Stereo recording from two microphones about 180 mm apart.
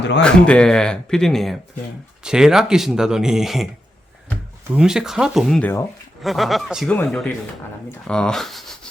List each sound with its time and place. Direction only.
0.2 s speech: 5° left (ahead or behind)
4.7 s speech: 5° right (ahead or behind)